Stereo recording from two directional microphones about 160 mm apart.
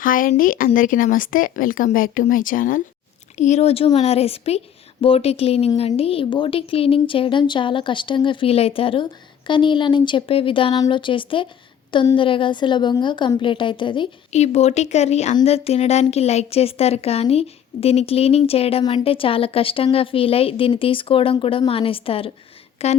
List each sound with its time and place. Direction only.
0.0 s speech: 60° left (ahead or behind)
3.3 s speech: 45° left (ahead or behind); by 14.1 s 30° left (ahead or behind)
14.3 s speech: 45° left (ahead or behind)